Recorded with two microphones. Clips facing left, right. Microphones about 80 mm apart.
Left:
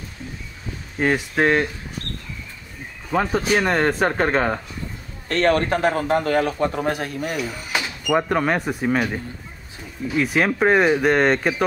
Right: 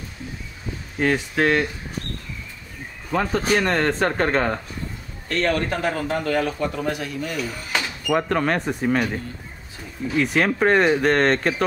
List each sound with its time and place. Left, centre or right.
0.9 s speech: centre
3.1 s speech: centre
5.3 s a man's voice: left
7.3 s speech: centre